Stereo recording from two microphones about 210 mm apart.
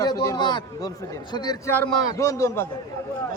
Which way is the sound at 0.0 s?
15° left (ahead or behind).